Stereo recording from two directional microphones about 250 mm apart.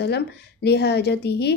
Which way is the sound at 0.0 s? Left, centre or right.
Left.